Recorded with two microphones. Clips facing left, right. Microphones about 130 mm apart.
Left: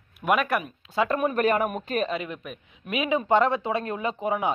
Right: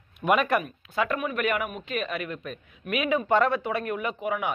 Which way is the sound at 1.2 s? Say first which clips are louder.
Left 5 dB; 35° left (ahead or behind).